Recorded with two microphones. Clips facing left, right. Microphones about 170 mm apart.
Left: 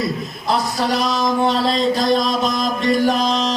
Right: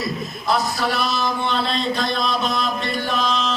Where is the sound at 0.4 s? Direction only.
35° left (ahead or behind).